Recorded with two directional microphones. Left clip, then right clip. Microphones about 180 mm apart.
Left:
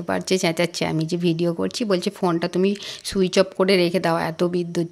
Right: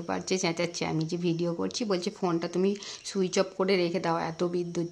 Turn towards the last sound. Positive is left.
turn(degrees=30)  # may be behind; listen again after turning